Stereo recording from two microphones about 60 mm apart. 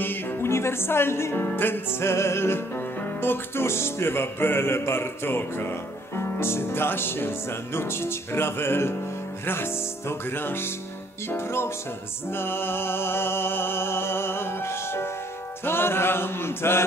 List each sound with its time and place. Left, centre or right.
0.0 s music: left